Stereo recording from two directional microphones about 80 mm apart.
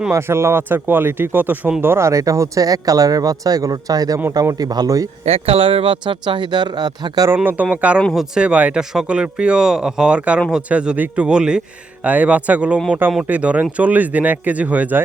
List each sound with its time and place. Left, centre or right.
0.1 s speech: right
1.8 s speech: right
5.8 s speech: right
7.3 s speech: centre